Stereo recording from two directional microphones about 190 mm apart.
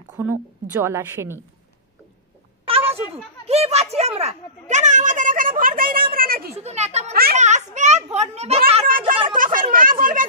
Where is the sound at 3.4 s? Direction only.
35° right (ahead or behind); by 6.5 s 50° right (ahead or behind).